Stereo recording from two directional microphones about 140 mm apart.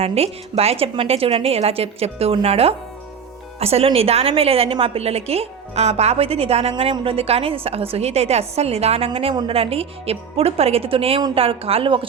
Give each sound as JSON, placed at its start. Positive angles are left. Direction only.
{"t": 0.0, "sound": "a woman's voice", "side_deg": -45}